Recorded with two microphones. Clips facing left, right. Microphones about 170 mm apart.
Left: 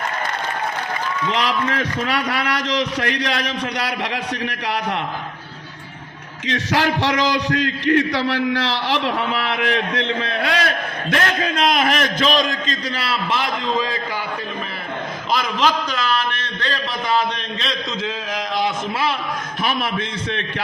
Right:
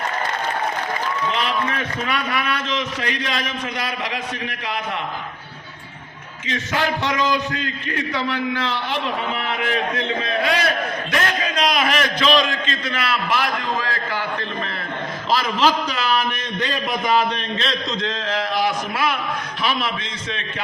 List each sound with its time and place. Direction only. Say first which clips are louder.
1.3 s a man's voice: left 5 dB; 80° left
6.5 s a man's voice: left 3 dB; 75° left (ahead or behind)
11.1 s a man's voice: left 4 dB; 55° left (ahead or behind); by 14.0 s 20° left (ahead or behind)
15.3 s a man's voice: right 1 dB; centre (ahead or behind)
17.6 s a man's voice: even; centre (ahead or behind)
18.3 s a sound: right 1 dB; 15° left (ahead or behind)
19.6 s a man's voice: left 1 dB; 55° left (ahead or behind)